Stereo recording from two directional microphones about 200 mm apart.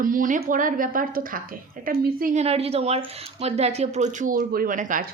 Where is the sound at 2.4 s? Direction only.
30° right (ahead or behind).